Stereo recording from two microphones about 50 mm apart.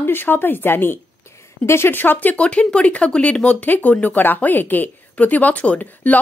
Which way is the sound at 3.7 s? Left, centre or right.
Left.